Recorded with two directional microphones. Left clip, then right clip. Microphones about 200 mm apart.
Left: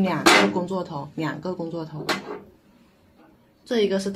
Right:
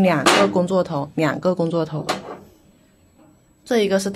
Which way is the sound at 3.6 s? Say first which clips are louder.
Right 4 dB; 40° right (ahead or behind).